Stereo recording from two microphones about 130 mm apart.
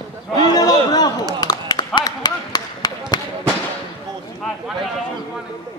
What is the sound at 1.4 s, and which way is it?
Run, 30° left (ahead or behind).